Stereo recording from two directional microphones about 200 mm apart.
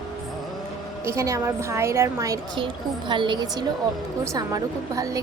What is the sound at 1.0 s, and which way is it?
A woman's voice, 15° right (ahead or behind).